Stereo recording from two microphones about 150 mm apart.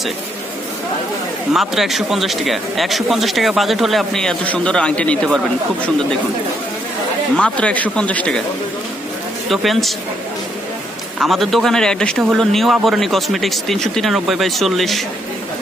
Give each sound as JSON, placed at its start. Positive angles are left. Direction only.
{"t": 1.5, "sound": "a man's voice", "side_deg": 0}
{"t": 7.3, "sound": "speech", "side_deg": 10}
{"t": 9.5, "sound": "a man's voice", "side_deg": 0}
{"t": 11.2, "sound": "a man's voice", "side_deg": 0}